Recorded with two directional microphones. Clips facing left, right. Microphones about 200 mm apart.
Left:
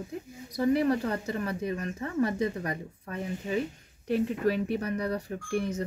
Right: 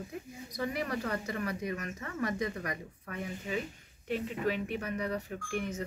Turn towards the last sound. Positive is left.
turn(degrees=35)  # may be behind; listen again after turning